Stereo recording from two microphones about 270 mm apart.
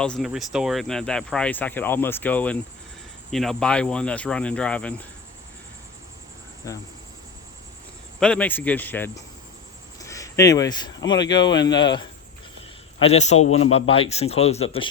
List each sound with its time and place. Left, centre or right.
0.0 s speech: centre
8.2 s a man's voice: centre; by 14.8 s left